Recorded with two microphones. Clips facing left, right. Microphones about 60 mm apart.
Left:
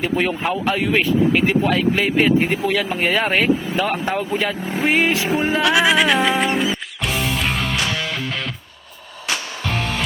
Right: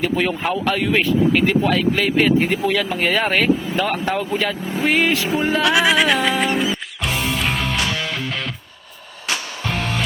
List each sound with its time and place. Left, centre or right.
0.0 s speech: centre
0.9 s speech: centre
4.9 s vehicle: centre
5.5 s music: centre